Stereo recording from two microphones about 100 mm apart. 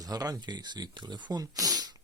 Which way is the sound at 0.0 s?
40° right (ahead or behind).